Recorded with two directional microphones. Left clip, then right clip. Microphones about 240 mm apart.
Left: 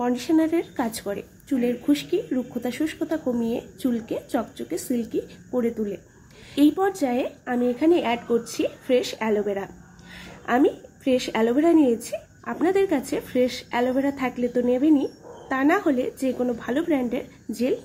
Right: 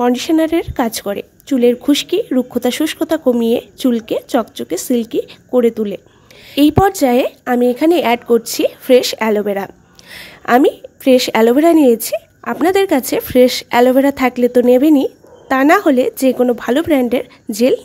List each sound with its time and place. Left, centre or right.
0.0 s a woman's voice: right